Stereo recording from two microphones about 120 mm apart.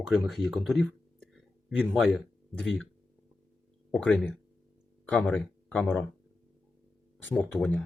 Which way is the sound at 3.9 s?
5° left (ahead or behind).